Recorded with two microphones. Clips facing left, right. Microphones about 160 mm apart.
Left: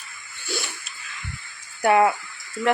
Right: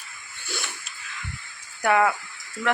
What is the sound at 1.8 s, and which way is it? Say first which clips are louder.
Speech: left 3 dB; 30° left (ahead or behind).